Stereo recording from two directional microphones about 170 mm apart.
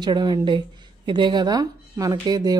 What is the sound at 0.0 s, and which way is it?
Speech, 25° right (ahead or behind).